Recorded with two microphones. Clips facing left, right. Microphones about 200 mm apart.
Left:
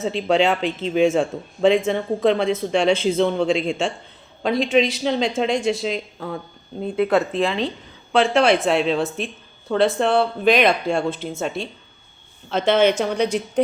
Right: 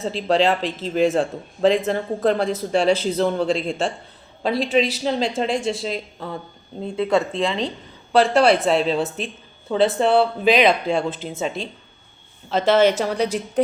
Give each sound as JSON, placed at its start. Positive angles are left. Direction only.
{"t": 0.2, "sound": "a woman's voice", "side_deg": 0}
{"t": 2.9, "sound": "a man's voice", "side_deg": -40}
{"t": 3.2, "sound": "a woman's voice", "side_deg": 0}